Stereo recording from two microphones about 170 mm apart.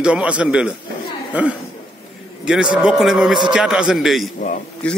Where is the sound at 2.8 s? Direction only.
5° right (ahead or behind).